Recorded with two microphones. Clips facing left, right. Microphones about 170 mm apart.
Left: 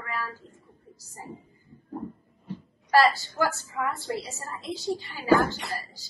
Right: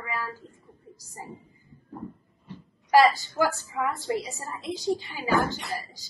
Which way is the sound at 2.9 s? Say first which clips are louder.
Right 2 dB; 15° right (ahead or behind).